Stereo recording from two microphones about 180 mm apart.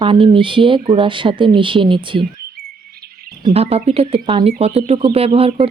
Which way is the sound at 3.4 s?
35° right (ahead or behind).